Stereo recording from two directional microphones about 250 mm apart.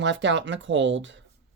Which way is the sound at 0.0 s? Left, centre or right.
Right.